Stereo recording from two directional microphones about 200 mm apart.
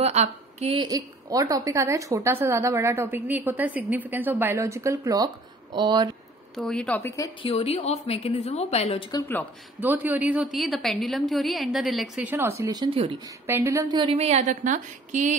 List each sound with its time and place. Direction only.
0.0 s a woman's voice: 35° right (ahead or behind)
6.5 s a woman's voice: 5° left (ahead or behind)
7.4 s a woman's voice: 30° left (ahead or behind)
9.8 s a woman's voice: 10° right (ahead or behind)
12.4 s speech: 10° right (ahead or behind)
13.5 s a woman's voice: 10° right (ahead or behind); by 15.3 s 40° right (ahead or behind)